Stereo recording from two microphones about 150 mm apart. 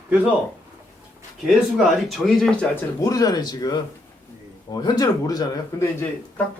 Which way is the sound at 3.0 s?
25° left (ahead or behind).